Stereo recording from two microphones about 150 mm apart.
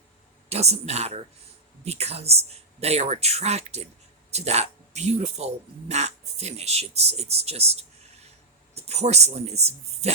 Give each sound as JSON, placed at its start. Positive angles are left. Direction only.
{"t": 0.5, "sound": "speech", "side_deg": -45}